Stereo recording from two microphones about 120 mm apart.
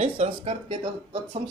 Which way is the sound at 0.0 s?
60° right (ahead or behind).